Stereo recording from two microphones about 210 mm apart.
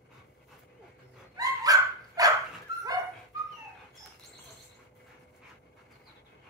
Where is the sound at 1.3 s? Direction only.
15° right (ahead or behind).